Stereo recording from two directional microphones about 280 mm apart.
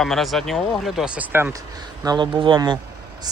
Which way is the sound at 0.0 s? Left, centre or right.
Centre.